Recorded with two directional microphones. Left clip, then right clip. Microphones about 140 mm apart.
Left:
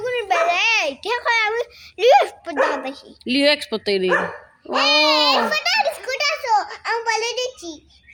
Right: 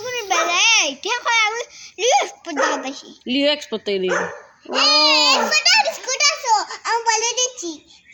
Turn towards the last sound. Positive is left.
turn(degrees=20)  # may be behind; listen again after turning